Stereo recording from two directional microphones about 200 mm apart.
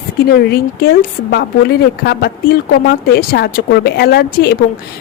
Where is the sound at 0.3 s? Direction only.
50° left (ahead or behind).